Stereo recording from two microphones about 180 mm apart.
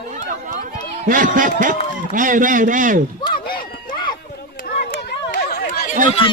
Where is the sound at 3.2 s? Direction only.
25° left (ahead or behind).